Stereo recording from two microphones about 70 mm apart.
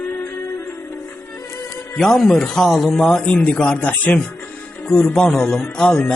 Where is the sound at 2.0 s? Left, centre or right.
Centre.